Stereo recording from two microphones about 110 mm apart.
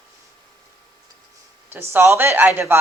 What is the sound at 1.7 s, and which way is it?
Speech, 20° right (ahead or behind).